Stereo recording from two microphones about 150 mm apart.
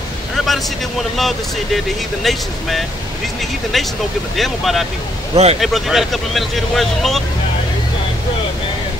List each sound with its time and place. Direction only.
0.5 s speech: centre (ahead or behind)
3.7 s speech: centre (ahead or behind)
5.3 s speech: 45° right (ahead or behind)
5.6 s speech: centre (ahead or behind)